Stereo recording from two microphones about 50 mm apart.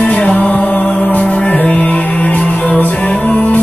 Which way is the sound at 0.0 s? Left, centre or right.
Left.